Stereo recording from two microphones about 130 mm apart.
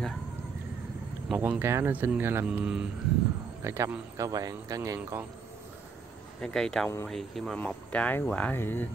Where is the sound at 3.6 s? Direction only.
20° right (ahead or behind).